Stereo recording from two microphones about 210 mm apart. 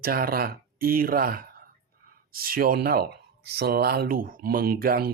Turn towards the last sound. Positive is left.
turn(degrees=-45)  # may be behind; listen again after turning